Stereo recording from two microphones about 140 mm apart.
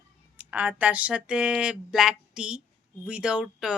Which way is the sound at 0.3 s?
10° right (ahead or behind).